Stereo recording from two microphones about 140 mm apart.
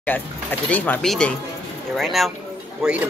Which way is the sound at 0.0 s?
10° left (ahead or behind).